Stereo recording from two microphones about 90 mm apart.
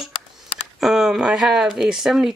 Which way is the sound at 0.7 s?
5° right (ahead or behind).